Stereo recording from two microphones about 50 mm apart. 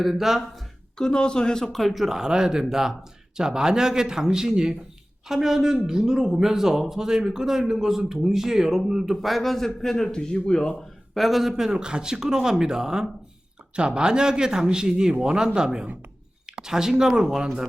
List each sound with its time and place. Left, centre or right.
0.0 s speech: centre
0.9 s a man's voice: centre
1.8 s speech: centre
9.2 s a man's voice: centre
10.8 s speech: centre